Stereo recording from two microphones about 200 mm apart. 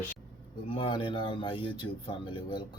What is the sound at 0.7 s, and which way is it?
Speech, 30° left (ahead or behind).